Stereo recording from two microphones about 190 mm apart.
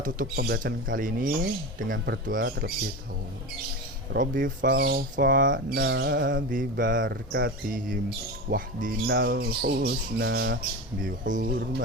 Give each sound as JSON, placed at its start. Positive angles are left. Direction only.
{"t": 0.0, "sound": "speech", "side_deg": -50}
{"t": 4.1, "sound": "speech", "side_deg": -45}
{"t": 11.0, "sound": "speech", "side_deg": -45}